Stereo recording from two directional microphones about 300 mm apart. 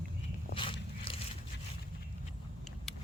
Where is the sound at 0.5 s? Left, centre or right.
Centre.